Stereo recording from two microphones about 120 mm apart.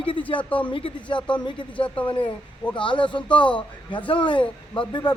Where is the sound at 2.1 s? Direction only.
45° left (ahead or behind).